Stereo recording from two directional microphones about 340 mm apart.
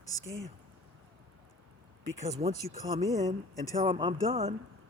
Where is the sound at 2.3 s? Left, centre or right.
Centre.